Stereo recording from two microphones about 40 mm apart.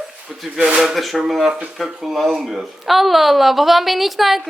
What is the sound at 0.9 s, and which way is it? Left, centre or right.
A woman's voice, centre.